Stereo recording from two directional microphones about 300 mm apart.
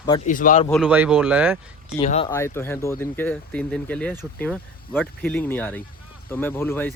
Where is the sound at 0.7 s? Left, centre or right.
Centre.